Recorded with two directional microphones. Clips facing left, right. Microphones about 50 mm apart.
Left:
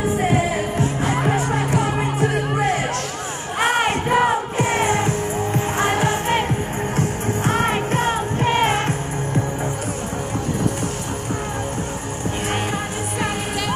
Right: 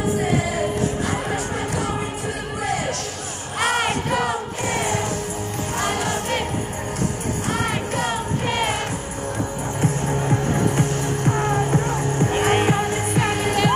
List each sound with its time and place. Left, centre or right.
3.5 s music: centre
12.4 s music: right